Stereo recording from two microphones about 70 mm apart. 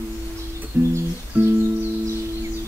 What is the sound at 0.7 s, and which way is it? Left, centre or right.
Music, right.